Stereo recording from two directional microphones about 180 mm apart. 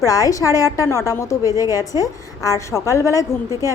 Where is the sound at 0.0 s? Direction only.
20° left (ahead or behind).